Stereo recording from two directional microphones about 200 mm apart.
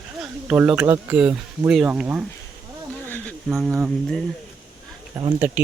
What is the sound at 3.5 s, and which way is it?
Speech, centre (ahead or behind).